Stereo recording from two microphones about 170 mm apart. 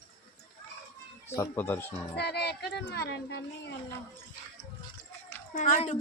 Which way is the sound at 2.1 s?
75° left (ahead or behind).